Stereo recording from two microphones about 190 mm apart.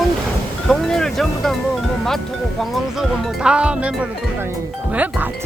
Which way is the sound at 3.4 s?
5° right (ahead or behind).